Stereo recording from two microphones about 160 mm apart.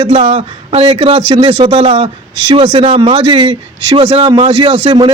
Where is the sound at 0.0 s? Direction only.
30° right (ahead or behind).